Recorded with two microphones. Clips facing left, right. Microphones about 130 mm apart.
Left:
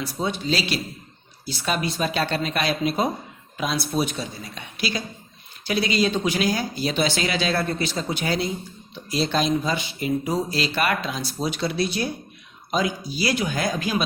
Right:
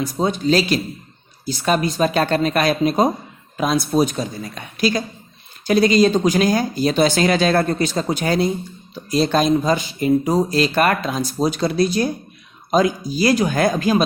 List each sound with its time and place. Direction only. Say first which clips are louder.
0.0 s speech: right 7 dB; 45° right (ahead or behind)